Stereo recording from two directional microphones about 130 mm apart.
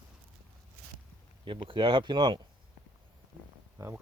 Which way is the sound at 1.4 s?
40° right (ahead or behind).